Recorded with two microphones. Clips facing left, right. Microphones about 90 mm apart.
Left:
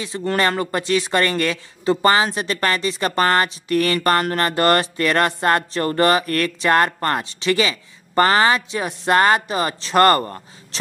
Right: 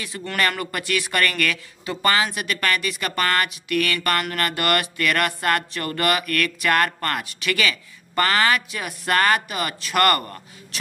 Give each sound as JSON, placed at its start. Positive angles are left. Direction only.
{"t": 0.2, "sound": "speech", "side_deg": 30}